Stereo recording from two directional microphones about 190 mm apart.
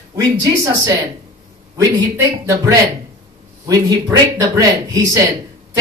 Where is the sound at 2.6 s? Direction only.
15° right (ahead or behind).